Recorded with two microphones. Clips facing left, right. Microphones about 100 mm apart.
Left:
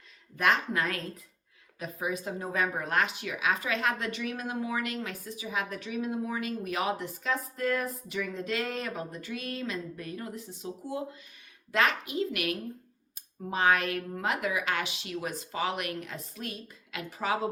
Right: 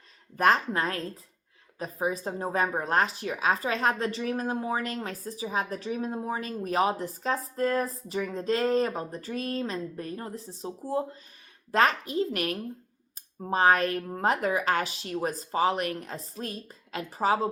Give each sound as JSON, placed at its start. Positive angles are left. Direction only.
{"t": 0.3, "sound": "a woman's voice", "side_deg": -35}